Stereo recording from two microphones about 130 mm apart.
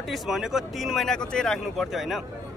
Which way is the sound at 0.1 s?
5° right (ahead or behind).